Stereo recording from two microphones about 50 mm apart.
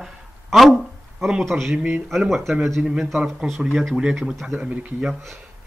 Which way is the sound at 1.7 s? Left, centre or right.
Centre.